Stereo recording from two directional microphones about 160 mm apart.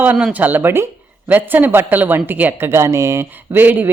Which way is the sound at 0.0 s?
10° right (ahead or behind).